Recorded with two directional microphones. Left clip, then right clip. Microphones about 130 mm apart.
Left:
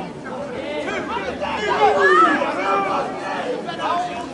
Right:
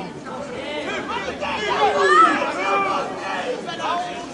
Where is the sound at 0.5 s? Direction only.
40° right (ahead or behind).